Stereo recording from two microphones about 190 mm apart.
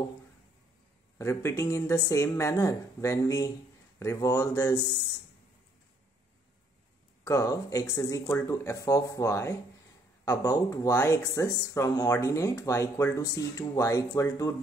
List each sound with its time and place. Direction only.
1.1 s speech: 15° left (ahead or behind)
7.2 s speech: 15° left (ahead or behind)